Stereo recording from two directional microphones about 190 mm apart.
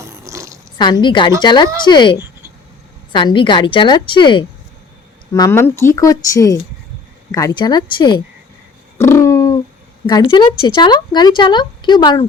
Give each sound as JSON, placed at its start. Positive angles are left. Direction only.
{"t": 0.0, "sound": "a sound", "side_deg": -15}
{"t": 0.8, "sound": "a woman's voice", "side_deg": 25}
{"t": 5.3, "sound": "a woman's voice", "side_deg": 15}
{"t": 9.0, "sound": "owl", "side_deg": 15}
{"t": 10.1, "sound": "a woman's voice", "side_deg": 20}